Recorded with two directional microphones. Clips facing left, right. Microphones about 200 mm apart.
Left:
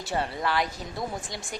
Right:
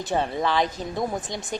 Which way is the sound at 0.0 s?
20° right (ahead or behind).